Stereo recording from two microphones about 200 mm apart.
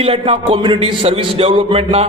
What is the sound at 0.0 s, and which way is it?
A man's voice, 25° right (ahead or behind).